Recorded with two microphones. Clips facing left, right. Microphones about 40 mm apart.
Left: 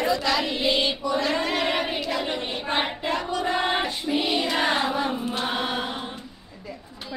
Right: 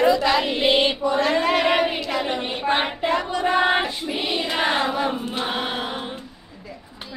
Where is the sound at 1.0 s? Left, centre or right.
Right.